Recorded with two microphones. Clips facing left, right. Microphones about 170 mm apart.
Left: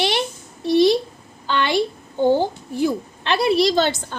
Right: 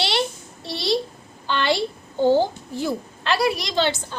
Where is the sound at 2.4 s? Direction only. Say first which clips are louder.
Left 2 dB; 15° left (ahead or behind); by 4.2 s 45° left (ahead or behind).